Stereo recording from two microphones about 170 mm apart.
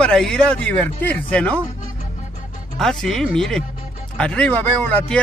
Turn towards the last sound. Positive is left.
turn(degrees=10)  # may be behind; listen again after turning